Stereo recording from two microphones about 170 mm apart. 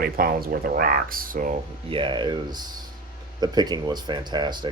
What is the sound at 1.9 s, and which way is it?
Speech, 30° right (ahead or behind).